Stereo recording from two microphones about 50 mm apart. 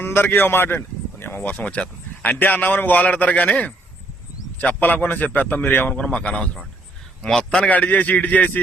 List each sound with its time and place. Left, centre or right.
0.0 s a man's voice: left
5.9 s speech: left
7.2 s speech: centre
7.7 s a man's voice: left